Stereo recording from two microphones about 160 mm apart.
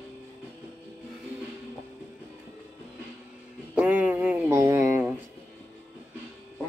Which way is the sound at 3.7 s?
10° right (ahead or behind).